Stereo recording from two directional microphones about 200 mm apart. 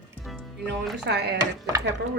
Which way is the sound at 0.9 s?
60° right (ahead or behind).